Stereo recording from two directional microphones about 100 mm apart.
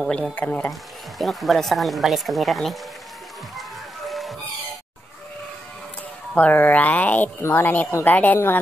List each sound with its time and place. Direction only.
0.0 s speech: centre (ahead or behind)
0.4 s speech: 15° left (ahead or behind)
0.7 s speech: centre (ahead or behind)
3.5 s music: centre (ahead or behind)
6.3 s a woman's voice: 15° left (ahead or behind)